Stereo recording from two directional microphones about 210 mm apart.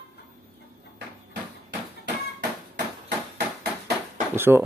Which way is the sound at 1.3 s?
50° right (ahead or behind).